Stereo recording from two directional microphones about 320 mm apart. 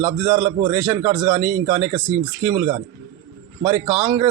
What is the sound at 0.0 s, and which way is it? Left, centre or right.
A man's voice, centre.